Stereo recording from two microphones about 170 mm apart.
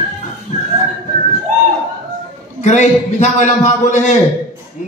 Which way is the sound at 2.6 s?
45° left (ahead or behind).